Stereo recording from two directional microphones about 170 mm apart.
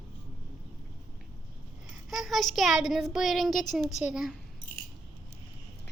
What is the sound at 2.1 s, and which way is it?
Speech, centre (ahead or behind).